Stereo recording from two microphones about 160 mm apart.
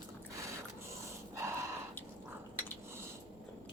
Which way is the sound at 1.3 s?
15° right (ahead or behind).